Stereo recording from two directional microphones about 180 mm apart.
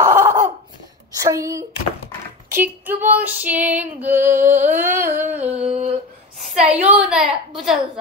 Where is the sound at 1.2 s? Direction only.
15° right (ahead or behind).